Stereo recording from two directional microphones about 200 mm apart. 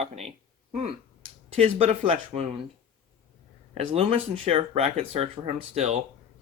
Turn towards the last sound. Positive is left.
turn(degrees=-30)  # may be behind; listen again after turning